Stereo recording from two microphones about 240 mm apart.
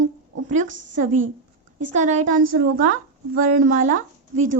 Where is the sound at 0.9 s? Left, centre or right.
Right.